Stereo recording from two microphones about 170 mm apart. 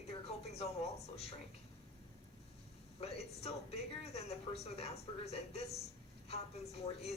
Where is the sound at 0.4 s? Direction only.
40° left (ahead or behind).